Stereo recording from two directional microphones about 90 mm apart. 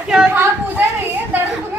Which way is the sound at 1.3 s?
20° right (ahead or behind).